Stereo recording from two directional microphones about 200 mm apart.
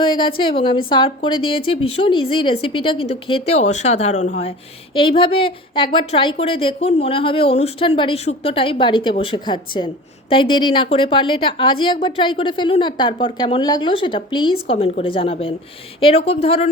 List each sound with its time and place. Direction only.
0.0 s a woman's voice: 25° left (ahead or behind)
4.9 s a woman's voice: 25° left (ahead or behind)